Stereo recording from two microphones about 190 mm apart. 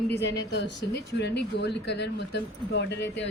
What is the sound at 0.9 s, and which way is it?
Speech, 60° left (ahead or behind).